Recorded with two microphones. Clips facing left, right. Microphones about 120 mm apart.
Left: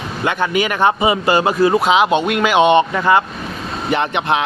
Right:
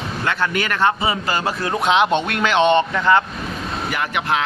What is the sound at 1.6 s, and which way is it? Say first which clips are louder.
Speech: left 2 dB; 5° left (ahead or behind).